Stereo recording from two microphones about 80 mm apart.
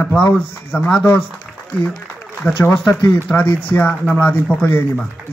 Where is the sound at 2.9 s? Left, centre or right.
Left.